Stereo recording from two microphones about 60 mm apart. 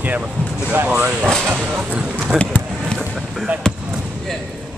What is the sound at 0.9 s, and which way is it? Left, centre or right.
Vehicle, right.